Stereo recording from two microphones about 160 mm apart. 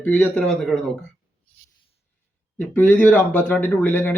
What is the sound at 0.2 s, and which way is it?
Speech, 5° left (ahead or behind).